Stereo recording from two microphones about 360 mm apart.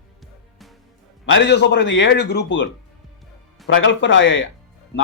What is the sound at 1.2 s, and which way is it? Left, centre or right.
A man's voice, left.